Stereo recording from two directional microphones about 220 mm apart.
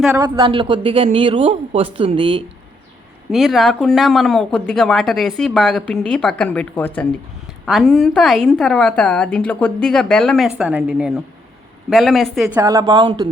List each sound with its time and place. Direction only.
0.1 s speech: 15° right (ahead or behind)
3.3 s speech: centre (ahead or behind)
12.5 s a woman's voice: 15° right (ahead or behind)